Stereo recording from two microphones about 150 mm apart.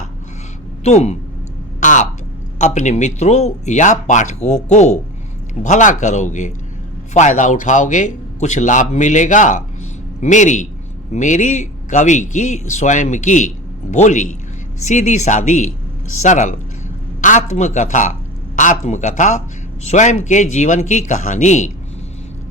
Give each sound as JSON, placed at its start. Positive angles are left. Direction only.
{"t": 0.9, "sound": "speech", "side_deg": 50}
{"t": 1.8, "sound": "a sound", "side_deg": 55}
{"t": 2.6, "sound": "a man's voice", "side_deg": 50}